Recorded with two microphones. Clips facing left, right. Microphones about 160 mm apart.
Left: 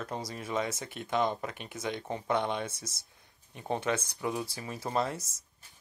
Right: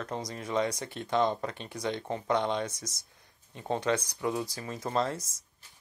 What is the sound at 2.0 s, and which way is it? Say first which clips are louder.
Speech: right 2 dB; 10° left (ahead or behind).